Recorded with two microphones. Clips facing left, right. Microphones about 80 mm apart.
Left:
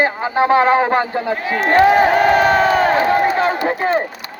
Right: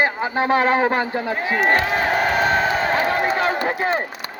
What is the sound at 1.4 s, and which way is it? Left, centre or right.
Speech, centre.